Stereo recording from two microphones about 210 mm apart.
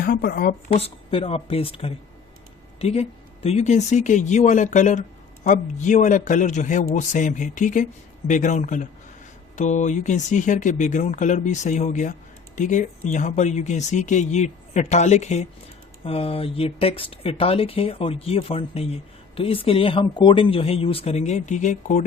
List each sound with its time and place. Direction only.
0.0 s speech: 45° left (ahead or behind)
0.7 s speech: 30° left (ahead or behind)